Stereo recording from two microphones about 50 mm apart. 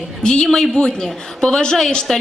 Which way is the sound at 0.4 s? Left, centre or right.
Centre.